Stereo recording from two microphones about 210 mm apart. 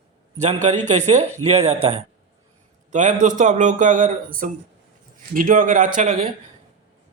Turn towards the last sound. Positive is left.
turn(degrees=-40)  # may be behind; listen again after turning